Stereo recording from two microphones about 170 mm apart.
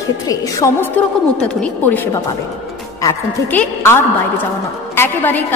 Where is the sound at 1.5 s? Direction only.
10° left (ahead or behind).